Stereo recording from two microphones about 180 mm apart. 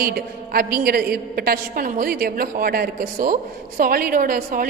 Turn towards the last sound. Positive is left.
turn(degrees=-50)  # may be behind; listen again after turning